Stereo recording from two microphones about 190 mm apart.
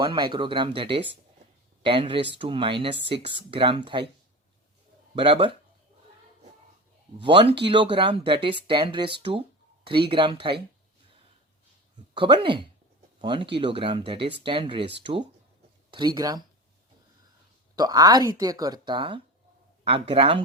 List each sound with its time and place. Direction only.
0.0 s speech: 25° right (ahead or behind)
5.1 s speech: 30° right (ahead or behind)
7.2 s speech: 25° right (ahead or behind)
12.1 s speech: 25° right (ahead or behind)
15.9 s speech: 20° right (ahead or behind)
17.7 s speech: 20° right (ahead or behind)